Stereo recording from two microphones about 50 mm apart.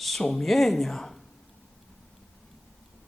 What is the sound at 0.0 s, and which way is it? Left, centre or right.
Speech, centre.